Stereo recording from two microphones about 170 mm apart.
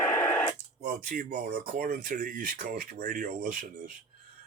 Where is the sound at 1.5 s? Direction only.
60° right (ahead or behind).